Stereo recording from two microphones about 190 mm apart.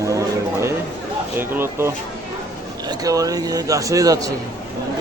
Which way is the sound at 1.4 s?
10° right (ahead or behind).